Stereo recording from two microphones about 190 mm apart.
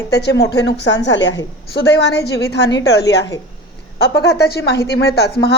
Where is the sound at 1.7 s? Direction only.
60° left (ahead or behind).